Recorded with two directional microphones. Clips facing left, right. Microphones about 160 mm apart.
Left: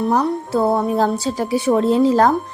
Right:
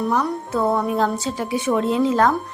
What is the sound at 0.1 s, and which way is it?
A woman's voice, 30° left (ahead or behind).